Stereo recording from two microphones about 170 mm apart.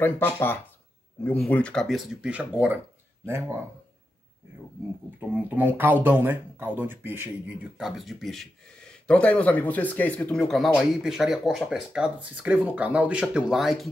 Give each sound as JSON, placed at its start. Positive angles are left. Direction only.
{"t": 0.0, "sound": "speech", "side_deg": 10}
{"t": 5.2, "sound": "speech", "side_deg": -10}